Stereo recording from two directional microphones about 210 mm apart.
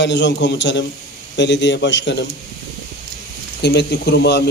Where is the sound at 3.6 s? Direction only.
50° left (ahead or behind).